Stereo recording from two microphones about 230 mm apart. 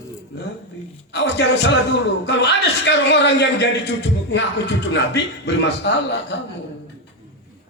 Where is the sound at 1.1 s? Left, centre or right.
Left.